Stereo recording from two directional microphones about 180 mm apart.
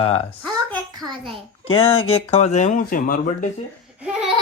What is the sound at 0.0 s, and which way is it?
Speech, 30° left (ahead or behind).